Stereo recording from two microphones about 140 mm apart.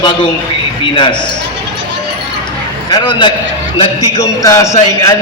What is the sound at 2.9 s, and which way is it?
A man's voice, 35° left (ahead or behind).